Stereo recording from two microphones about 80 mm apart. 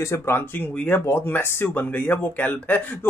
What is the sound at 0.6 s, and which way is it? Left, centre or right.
Speech, left.